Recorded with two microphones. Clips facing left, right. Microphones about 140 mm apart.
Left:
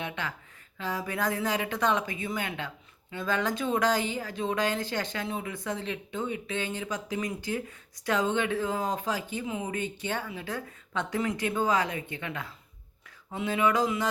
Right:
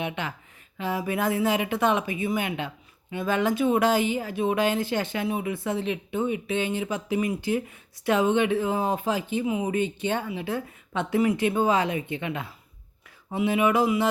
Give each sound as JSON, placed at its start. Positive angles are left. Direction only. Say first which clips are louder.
{"t": 0.0, "sound": "speech", "louder": "right 4 dB", "side_deg": -15}